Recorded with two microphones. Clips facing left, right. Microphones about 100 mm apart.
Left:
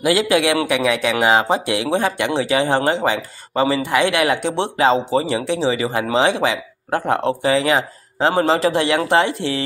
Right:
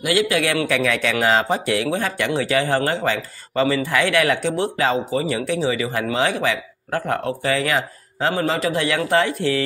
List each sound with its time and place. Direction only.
0.0 s speech: 30° left (ahead or behind)